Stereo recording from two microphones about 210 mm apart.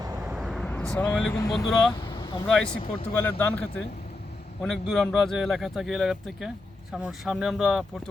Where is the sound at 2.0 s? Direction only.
20° left (ahead or behind).